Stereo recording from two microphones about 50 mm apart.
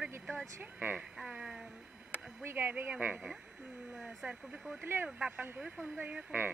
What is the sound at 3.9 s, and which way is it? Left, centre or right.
Speech, centre.